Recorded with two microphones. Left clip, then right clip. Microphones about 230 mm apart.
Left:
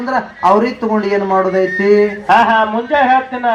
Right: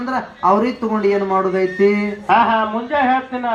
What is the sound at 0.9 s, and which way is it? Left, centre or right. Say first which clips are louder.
A man's voice: left 1 dB; left.